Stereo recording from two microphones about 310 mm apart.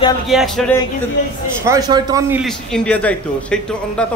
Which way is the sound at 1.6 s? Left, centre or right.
Centre.